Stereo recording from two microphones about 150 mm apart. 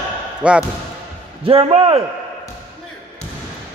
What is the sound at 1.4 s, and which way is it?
Speech, 40° right (ahead or behind).